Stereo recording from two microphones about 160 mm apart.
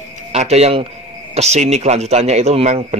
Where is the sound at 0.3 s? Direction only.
40° right (ahead or behind).